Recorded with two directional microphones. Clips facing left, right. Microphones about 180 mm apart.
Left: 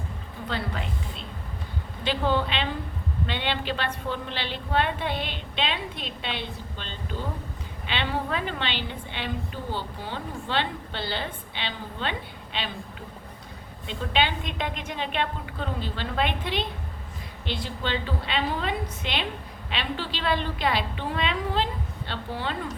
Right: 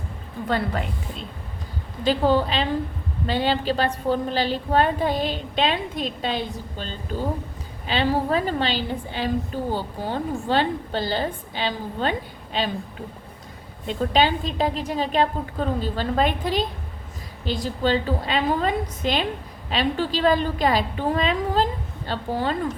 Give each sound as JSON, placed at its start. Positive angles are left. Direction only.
{"t": 0.4, "sound": "a woman's voice", "side_deg": -45}
{"t": 13.8, "sound": "a woman's voice", "side_deg": -40}